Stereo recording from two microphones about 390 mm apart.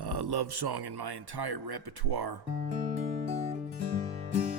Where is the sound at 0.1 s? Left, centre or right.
Right.